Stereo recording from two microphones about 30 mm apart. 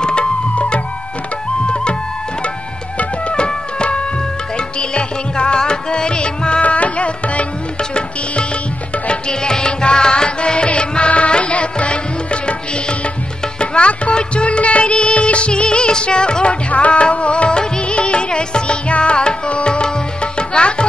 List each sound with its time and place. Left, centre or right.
0.0 s music: left
3.3 s music: left
6.6 s music: left
9.1 s music: left
18.9 s tabla: left
19.1 s tabla: left